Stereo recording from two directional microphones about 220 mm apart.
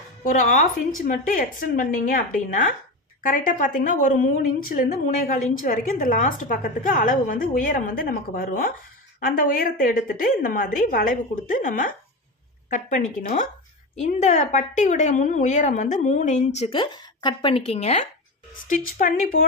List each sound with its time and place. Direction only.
0.3 s a woman's voice: 35° left (ahead or behind)